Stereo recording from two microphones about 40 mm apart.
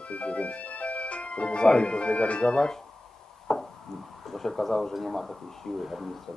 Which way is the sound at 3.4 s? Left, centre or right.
Centre.